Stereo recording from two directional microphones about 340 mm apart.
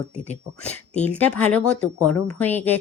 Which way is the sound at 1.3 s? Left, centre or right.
Left.